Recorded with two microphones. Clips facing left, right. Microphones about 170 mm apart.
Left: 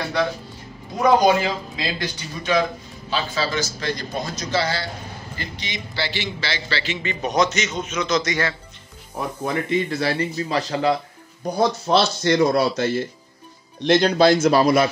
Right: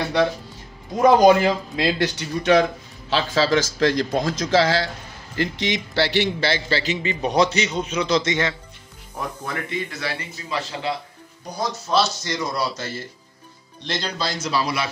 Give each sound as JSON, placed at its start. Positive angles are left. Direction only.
{"t": 1.2, "sound": "speech", "side_deg": -55}
{"t": 3.1, "sound": "a man's voice", "side_deg": -85}
{"t": 7.0, "sound": "a man's voice", "side_deg": -30}
{"t": 9.4, "sound": "speech", "side_deg": 30}
{"t": 11.5, "sound": "speech", "side_deg": 55}